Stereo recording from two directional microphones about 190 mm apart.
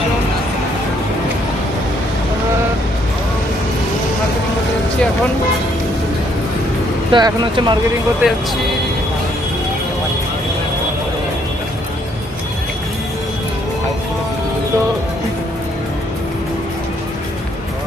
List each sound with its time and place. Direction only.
7.1 s speech: 25° right (ahead or behind)
8.2 s speech: 5° right (ahead or behind)